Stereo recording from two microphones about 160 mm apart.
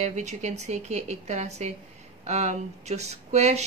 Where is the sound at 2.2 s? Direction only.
45° right (ahead or behind).